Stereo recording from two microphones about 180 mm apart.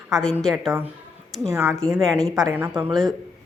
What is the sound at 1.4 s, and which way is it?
Speech, 15° right (ahead or behind).